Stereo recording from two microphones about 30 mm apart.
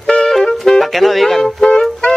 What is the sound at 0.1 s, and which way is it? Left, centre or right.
Music, left.